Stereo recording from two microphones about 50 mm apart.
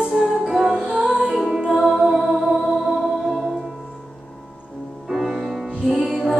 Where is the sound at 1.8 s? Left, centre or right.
Centre.